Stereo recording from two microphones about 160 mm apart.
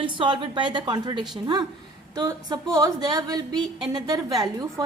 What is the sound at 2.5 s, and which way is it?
A woman's voice, 25° right (ahead or behind).